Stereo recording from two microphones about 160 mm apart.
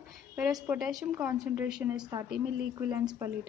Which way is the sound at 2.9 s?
15° right (ahead or behind).